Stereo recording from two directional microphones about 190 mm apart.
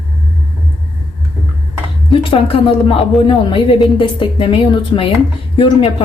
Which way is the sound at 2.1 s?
25° left (ahead or behind).